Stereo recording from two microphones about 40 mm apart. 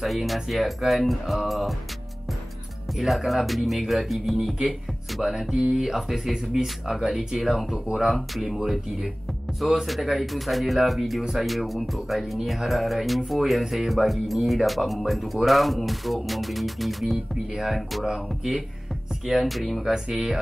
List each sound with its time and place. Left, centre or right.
0.0 s speech: centre
3.3 s speech: centre
5.1 s music: centre
5.9 s speech: centre
9.8 s speech: centre
18.0 s music: centre
19.2 s speech: centre
19.9 s music: centre